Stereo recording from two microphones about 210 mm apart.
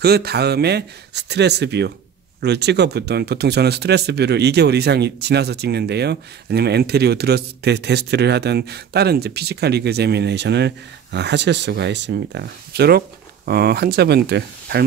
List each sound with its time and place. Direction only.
0.0 s speech: 50° right (ahead or behind)